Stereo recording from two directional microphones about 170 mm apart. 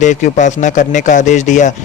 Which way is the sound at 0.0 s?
45° left (ahead or behind).